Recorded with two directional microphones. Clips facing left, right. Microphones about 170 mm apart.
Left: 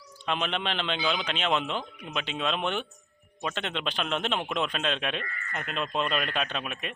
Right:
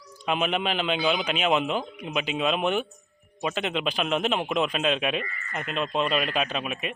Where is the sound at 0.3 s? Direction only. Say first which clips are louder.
Right 4 dB; 10° right (ahead or behind).